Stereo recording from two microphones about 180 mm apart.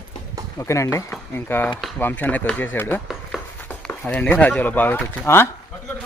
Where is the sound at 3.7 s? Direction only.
10° left (ahead or behind).